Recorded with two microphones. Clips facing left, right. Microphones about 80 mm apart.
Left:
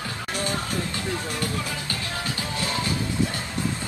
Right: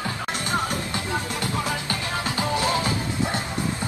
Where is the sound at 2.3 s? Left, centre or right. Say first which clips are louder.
Right 7 dB; right.